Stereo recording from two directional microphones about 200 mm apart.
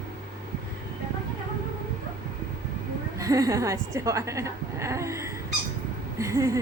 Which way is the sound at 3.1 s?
15° right (ahead or behind).